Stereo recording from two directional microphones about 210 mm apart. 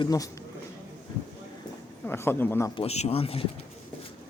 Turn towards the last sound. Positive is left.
turn(degrees=25)  # may be behind; listen again after turning